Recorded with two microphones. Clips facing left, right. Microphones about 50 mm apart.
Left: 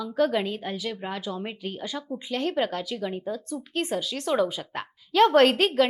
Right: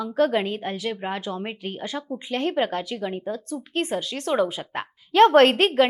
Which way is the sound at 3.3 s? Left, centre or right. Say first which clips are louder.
Right 2 dB; right.